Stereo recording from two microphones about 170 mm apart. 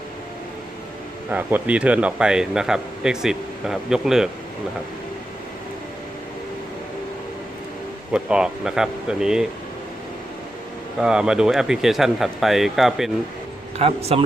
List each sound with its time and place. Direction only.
1.3 s speech: 10° right (ahead or behind)
8.1 s speech: 5° right (ahead or behind)
11.0 s speech: 5° right (ahead or behind)
13.7 s speech: 35° right (ahead or behind)